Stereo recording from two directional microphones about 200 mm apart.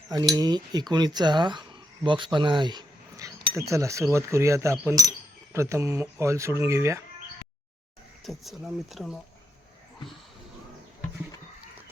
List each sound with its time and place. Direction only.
0.3 s speech: 20° right (ahead or behind)
8.2 s speech: centre (ahead or behind)